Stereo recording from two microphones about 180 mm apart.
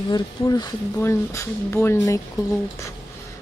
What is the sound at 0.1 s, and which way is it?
Speech, 25° left (ahead or behind).